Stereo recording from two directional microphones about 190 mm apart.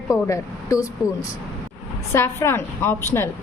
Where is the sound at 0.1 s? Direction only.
15° left (ahead or behind).